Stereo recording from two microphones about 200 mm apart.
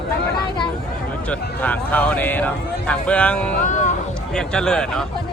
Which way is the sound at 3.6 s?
40° left (ahead or behind).